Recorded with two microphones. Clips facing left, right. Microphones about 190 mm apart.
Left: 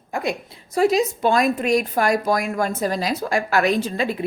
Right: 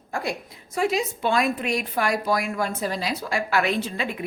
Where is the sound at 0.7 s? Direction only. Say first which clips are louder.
Left 6 dB; 40° left (ahead or behind).